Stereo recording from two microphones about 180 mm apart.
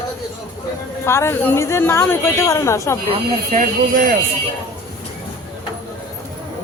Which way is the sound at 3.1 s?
45° right (ahead or behind).